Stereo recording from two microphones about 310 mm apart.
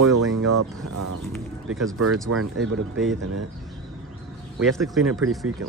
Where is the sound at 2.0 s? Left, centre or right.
Right.